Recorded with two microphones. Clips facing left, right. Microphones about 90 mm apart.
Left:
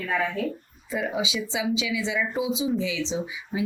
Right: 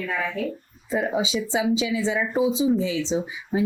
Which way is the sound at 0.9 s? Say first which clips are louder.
Right 4 dB; 35° right (ahead or behind).